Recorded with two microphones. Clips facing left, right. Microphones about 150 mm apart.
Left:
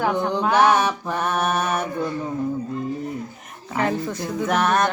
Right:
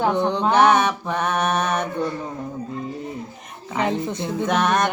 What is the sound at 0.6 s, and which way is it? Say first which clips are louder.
Mantra: right 2 dB; 10° left (ahead or behind).